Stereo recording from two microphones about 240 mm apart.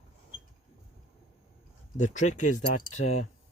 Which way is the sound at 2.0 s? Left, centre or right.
Left.